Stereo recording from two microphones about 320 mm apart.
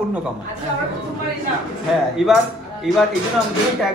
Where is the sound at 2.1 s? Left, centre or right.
Centre.